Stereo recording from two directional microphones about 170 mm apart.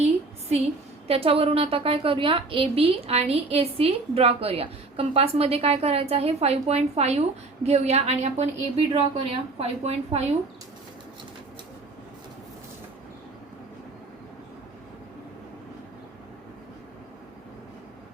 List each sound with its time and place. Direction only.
0.0 s a woman's voice: 35° right (ahead or behind)